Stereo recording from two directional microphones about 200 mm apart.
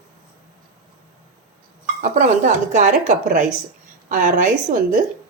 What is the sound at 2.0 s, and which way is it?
A woman's voice, 40° right (ahead or behind).